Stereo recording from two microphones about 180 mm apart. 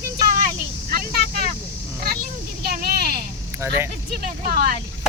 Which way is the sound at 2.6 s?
60° right (ahead or behind).